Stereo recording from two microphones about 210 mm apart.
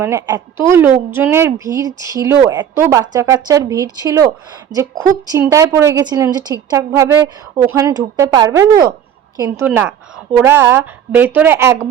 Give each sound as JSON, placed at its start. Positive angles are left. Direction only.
{"t": 0.0, "sound": "a woman's voice", "side_deg": -15}
{"t": 5.3, "sound": "a woman's voice", "side_deg": -15}